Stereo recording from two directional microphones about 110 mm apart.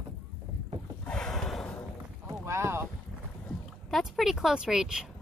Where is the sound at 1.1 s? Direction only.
5° left (ahead or behind).